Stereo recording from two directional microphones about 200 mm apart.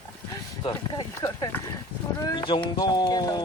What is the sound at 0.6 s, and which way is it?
Speech, 20° left (ahead or behind).